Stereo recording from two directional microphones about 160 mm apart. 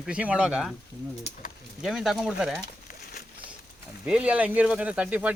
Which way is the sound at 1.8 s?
5° right (ahead or behind).